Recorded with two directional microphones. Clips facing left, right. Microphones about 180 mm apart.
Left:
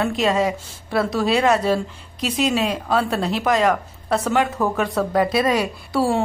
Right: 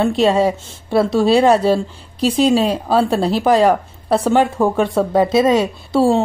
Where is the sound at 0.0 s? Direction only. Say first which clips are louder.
Right 5 dB; 30° right (ahead or behind).